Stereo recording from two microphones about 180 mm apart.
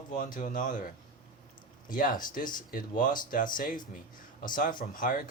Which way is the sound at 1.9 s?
50° left (ahead or behind).